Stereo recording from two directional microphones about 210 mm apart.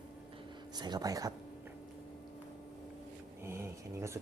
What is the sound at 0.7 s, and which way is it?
Speech, 20° right (ahead or behind).